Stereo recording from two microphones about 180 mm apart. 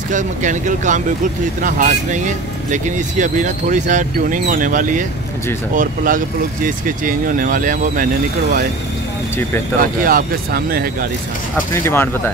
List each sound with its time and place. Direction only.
0.1 s speech: 45° right (ahead or behind)
10.0 s speech: 55° right (ahead or behind)
11.5 s speech: 15° left (ahead or behind)